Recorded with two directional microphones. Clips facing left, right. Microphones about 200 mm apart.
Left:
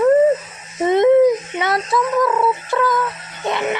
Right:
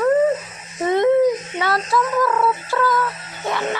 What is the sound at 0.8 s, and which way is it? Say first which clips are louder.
Speech: left 3 dB; 20° left (ahead or behind).